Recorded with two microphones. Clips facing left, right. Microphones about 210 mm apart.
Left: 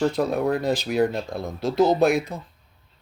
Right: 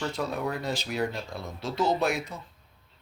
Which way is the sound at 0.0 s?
55° left (ahead or behind).